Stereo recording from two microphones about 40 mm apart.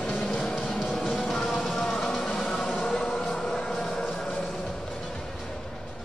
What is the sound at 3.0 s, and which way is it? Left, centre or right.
Music, centre.